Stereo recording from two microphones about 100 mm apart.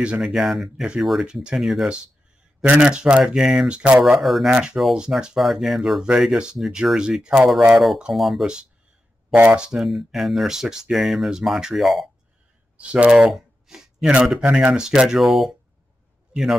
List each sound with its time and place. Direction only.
0.0 s speech: 10° right (ahead or behind)
2.6 s speech: 10° right (ahead or behind)
9.3 s speech: 15° right (ahead or behind)
9.7 s speech: centre (ahead or behind)
12.7 s speech: 15° right (ahead or behind)